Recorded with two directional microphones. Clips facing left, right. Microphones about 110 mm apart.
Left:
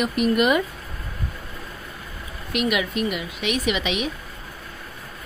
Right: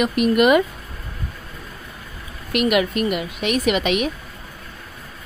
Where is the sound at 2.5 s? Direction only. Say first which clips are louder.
Right 5 dB; 55° right (ahead or behind).